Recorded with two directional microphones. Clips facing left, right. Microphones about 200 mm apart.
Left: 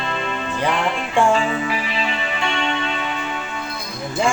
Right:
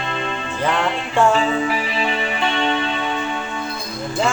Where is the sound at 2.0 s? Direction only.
35° right (ahead or behind).